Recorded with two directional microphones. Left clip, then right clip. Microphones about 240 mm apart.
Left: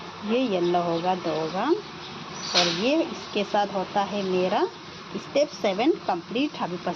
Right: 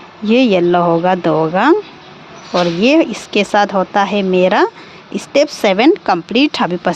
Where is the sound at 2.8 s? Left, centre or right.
Right.